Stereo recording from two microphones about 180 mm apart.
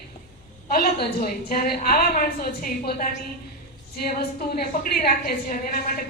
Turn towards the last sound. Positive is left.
turn(degrees=55)  # may be behind; listen again after turning